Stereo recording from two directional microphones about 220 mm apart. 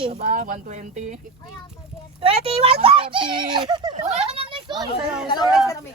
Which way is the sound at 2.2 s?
25° right (ahead or behind).